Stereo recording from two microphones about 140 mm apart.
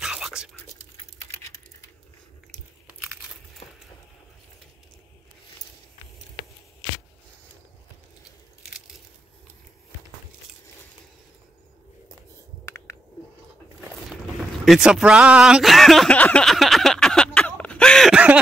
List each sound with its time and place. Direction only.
0.0 s whispering: 5° right (ahead or behind)
1.3 s typing: 25° left (ahead or behind)
14.6 s a sound: 5° right (ahead or behind)